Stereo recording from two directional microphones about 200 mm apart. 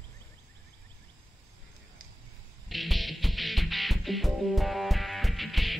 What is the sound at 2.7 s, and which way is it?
Music, centre (ahead or behind).